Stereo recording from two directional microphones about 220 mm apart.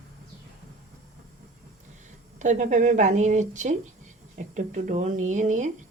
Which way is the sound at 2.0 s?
35° right (ahead or behind).